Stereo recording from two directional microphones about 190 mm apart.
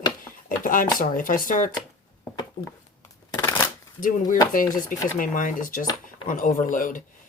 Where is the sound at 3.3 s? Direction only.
15° left (ahead or behind).